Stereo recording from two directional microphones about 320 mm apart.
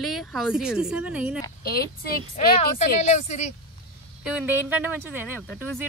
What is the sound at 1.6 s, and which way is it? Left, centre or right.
A woman's voice, left.